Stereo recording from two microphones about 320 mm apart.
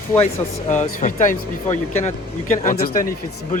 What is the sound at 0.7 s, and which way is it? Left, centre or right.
Speech, left.